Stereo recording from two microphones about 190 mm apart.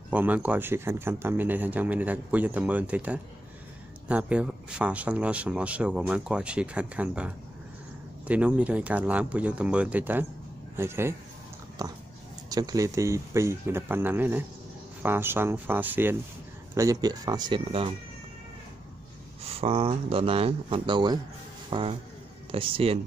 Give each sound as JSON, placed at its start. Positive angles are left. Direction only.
{"t": 0.1, "sound": "speech", "side_deg": -10}
{"t": 19.4, "sound": "speech", "side_deg": -30}